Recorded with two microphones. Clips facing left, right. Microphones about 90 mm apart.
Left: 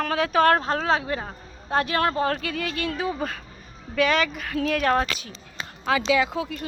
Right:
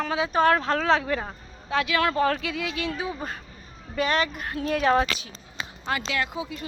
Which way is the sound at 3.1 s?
90° left.